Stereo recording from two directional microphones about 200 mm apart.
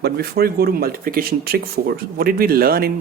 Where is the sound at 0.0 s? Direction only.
50° right (ahead or behind).